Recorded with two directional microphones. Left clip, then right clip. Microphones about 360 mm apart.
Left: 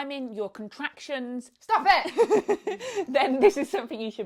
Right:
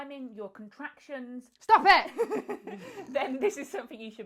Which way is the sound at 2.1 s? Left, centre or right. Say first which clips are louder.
Left 10 dB; left.